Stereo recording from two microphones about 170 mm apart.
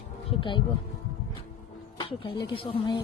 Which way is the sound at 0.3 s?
30° left (ahead or behind).